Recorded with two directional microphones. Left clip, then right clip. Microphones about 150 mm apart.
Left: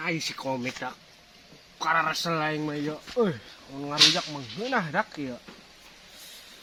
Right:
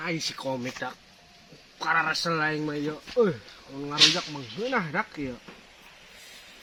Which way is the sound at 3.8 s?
10° left (ahead or behind).